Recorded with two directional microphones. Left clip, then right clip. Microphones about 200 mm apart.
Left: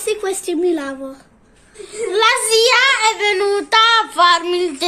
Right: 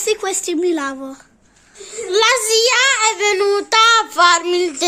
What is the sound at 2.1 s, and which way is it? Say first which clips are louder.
Child singing: even; 50° right (ahead or behind).